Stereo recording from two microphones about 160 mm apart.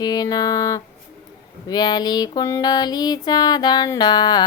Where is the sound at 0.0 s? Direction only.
25° left (ahead or behind).